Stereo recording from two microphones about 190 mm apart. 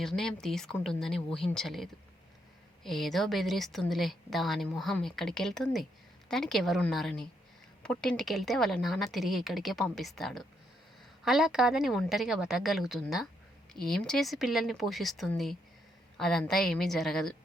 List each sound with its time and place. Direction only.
0.0 s a woman's voice: centre (ahead or behind)